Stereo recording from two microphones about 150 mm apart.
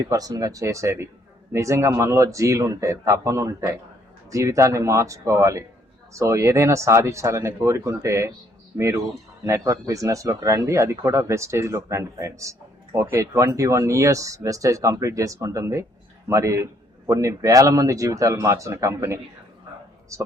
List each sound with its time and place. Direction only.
0.1 s speech: 25° right (ahead or behind)
9.4 s speech: 20° right (ahead or behind)